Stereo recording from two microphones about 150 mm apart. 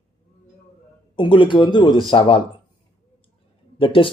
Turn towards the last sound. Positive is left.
turn(degrees=35)  # may be behind; listen again after turning